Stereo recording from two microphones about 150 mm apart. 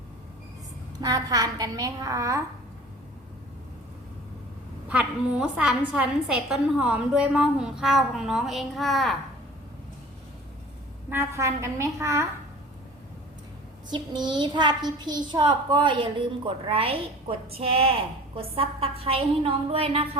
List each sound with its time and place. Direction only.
1.0 s a woman's voice: 25° right (ahead or behind)
4.9 s a woman's voice: 10° right (ahead or behind)
11.1 s a woman's voice: 15° right (ahead or behind)
13.9 s a child's voice: 30° right (ahead or behind)